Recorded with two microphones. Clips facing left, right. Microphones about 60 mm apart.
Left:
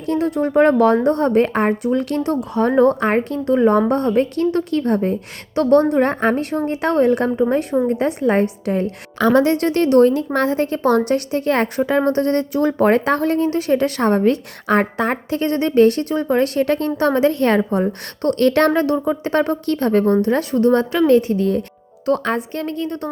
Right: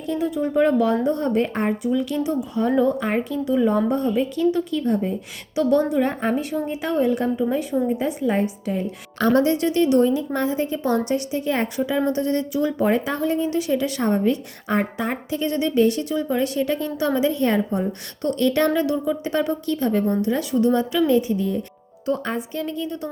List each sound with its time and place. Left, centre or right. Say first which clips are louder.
0.0 s a woman's voice: left 4 dB; left
5.5 s a woman's voice: left 5 dB; left
7.3 s a woman's voice: left 4 dB; left
18.2 s a woman's voice: left 5 dB; left
22.0 s a woman's voice: left 5 dB; left